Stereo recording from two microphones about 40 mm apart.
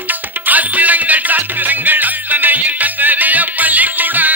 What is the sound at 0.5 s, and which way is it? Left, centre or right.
Music, right.